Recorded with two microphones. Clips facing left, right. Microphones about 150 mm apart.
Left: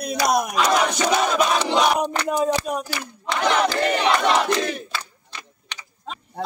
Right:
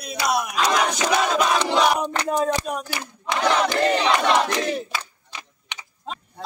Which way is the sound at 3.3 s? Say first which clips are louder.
Even; 20° right (ahead or behind).